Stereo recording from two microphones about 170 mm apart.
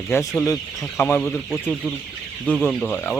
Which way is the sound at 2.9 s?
15° left (ahead or behind).